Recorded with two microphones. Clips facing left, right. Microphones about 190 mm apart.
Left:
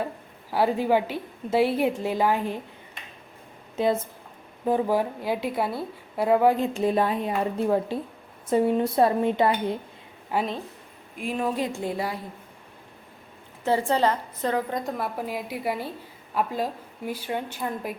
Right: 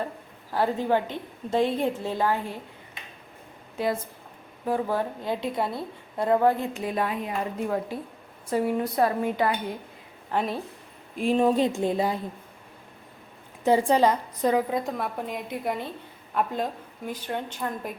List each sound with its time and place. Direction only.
0.5 s a woman's voice: 10° left (ahead or behind)
3.8 s a woman's voice: 25° left (ahead or behind)
6.7 s a woman's voice: 30° left (ahead or behind)
10.3 s a woman's voice: centre (ahead or behind)
11.2 s speech: 25° right (ahead or behind)
13.7 s a woman's voice: 15° right (ahead or behind); by 17.9 s 10° left (ahead or behind)